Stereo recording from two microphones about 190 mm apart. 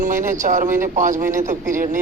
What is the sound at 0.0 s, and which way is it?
Speech, 45° right (ahead or behind).